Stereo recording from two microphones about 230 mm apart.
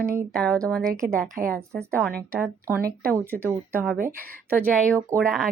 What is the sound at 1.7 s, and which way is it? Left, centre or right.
Speech, centre.